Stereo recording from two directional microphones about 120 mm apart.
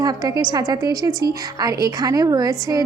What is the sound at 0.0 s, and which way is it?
A woman's voice, 35° right (ahead or behind).